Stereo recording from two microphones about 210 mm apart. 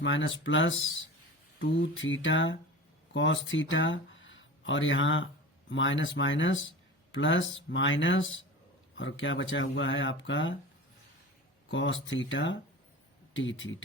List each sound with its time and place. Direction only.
0.0 s speech: 65° left (ahead or behind)
11.7 s speech: 65° left (ahead or behind)